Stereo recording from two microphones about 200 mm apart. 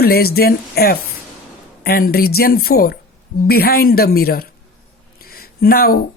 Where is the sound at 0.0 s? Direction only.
50° left (ahead or behind).